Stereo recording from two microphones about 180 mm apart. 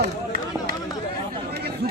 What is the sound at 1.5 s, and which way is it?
Chatter, 60° right (ahead or behind).